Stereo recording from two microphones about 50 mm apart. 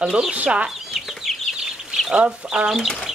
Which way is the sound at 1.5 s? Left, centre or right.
Centre.